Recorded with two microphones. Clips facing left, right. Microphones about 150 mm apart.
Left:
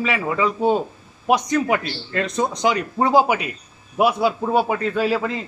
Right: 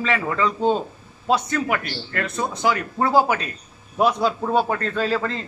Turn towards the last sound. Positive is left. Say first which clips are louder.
# left 2 dB
turn(degrees=10)  # may be behind; listen again after turning